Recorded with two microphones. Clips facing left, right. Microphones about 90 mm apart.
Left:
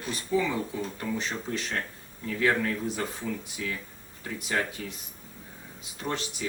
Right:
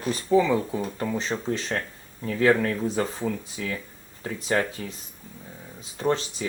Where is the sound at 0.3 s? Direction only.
35° right (ahead or behind).